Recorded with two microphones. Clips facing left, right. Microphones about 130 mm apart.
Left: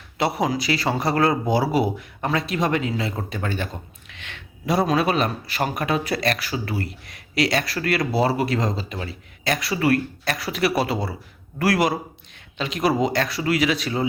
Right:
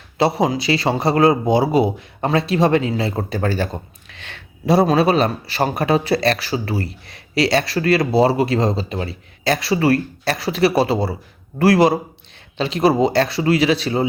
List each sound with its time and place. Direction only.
0.2 s speech: 25° right (ahead or behind)